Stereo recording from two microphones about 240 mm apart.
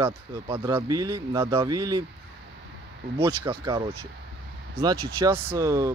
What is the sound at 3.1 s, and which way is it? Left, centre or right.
Speech, centre.